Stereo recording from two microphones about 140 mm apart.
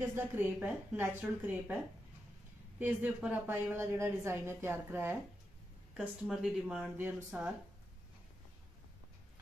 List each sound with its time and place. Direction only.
0.1 s a woman's voice: 15° right (ahead or behind)
2.8 s a woman's voice: 10° right (ahead or behind)
5.9 s speech: 5° right (ahead or behind)
7.0 s a woman's voice: 15° right (ahead or behind)